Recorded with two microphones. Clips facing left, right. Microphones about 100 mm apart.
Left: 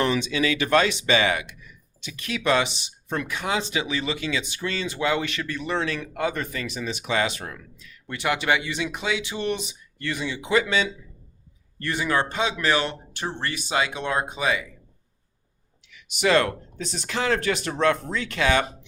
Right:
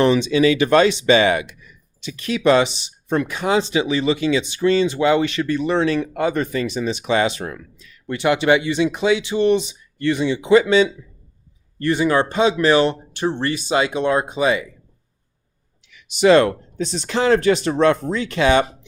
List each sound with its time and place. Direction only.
0.0 s speech: 25° right (ahead or behind)
16.0 s speech: 30° right (ahead or behind)